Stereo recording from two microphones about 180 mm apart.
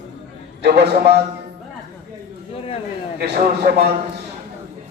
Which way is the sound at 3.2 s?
65° right (ahead or behind).